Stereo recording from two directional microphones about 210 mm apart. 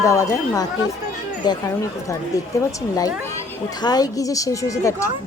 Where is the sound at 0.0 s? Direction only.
15° left (ahead or behind).